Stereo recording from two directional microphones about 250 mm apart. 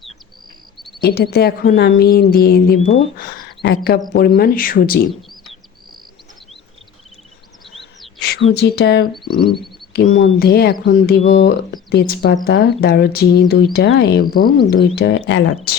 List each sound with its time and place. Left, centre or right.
1.0 s a woman's voice: left
8.4 s speech: left
9.2 s speech: centre
9.9 s a woman's voice: left